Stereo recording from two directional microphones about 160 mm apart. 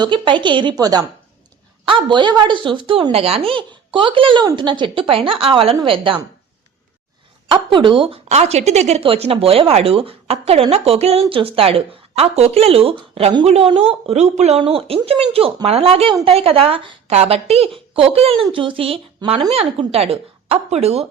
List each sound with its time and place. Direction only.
0.0 s a woman's voice: 30° right (ahead or behind)
7.4 s speech: 30° right (ahead or behind)